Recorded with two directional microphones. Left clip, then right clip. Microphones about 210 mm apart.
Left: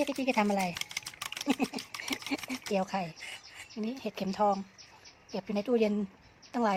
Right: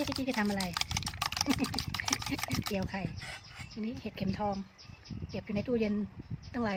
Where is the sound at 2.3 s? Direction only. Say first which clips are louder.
Left 3 dB; 10° left (ahead or behind).